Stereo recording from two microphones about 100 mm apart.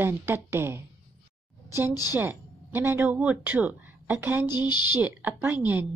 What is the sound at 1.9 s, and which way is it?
Speech, 40° left (ahead or behind).